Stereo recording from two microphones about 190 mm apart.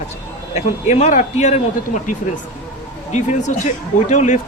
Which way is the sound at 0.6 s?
35° left (ahead or behind).